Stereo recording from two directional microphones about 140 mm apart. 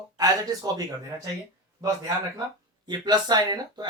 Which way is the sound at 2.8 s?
30° right (ahead or behind).